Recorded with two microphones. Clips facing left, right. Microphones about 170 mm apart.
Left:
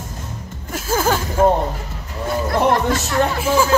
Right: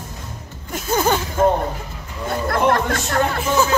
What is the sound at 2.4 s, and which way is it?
Speech, 60° right (ahead or behind).